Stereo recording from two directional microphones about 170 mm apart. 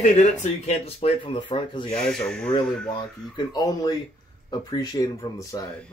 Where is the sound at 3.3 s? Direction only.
25° left (ahead or behind).